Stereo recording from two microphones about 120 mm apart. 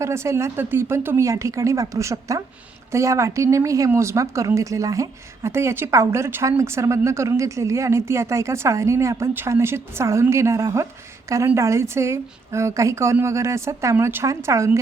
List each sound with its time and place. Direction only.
0.0 s speech: 25° right (ahead or behind)